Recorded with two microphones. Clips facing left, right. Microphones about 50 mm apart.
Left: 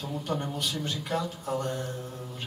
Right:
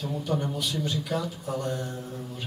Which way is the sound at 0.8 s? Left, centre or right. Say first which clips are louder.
Right 2 dB; left.